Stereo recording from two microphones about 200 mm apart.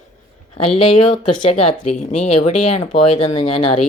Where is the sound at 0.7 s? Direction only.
30° left (ahead or behind).